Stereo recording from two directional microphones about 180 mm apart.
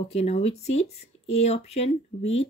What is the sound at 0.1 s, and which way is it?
Speech, 35° left (ahead or behind).